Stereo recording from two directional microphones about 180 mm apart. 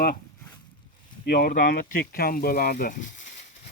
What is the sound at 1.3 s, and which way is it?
Speech, 55° left (ahead or behind).